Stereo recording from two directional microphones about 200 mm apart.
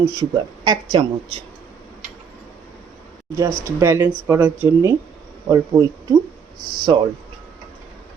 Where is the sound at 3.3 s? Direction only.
15° right (ahead or behind).